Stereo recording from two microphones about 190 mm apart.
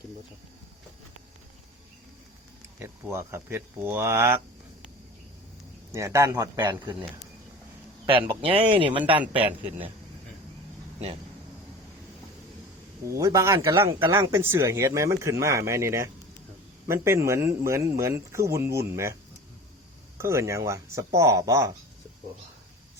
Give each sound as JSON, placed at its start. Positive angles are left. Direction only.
{"t": 2.7, "sound": "a man's voice", "side_deg": -15}
{"t": 5.9, "sound": "a man's voice", "side_deg": -15}
{"t": 8.4, "sound": "speech", "side_deg": -30}
{"t": 13.1, "sound": "a man's voice", "side_deg": -15}
{"t": 20.1, "sound": "a man's voice", "side_deg": -15}